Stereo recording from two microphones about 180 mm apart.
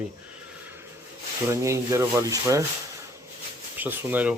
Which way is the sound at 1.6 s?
15° right (ahead or behind).